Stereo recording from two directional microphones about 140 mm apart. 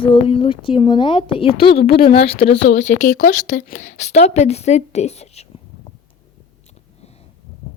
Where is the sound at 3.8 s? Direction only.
55° left (ahead or behind).